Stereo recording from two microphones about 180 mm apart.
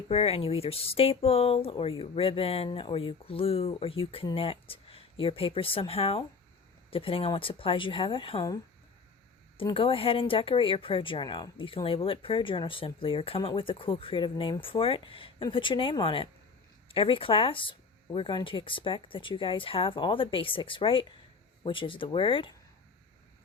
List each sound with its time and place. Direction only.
0.1 s speech: 35° left (ahead or behind)
9.6 s speech: 30° left (ahead or behind)